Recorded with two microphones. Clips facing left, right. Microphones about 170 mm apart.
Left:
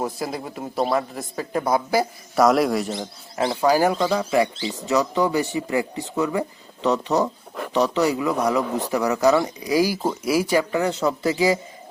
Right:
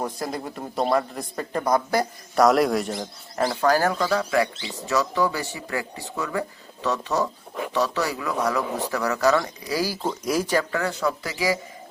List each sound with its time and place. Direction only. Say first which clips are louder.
0.0 s a man's voice: left 2 dB; 5° left (ahead or behind)
3.6 s speech: left 3 dB; 10° left (ahead or behind)
3.9 s speech: left 2 dB; 25° left (ahead or behind)